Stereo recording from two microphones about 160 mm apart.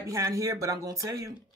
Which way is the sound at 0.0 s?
20° right (ahead or behind).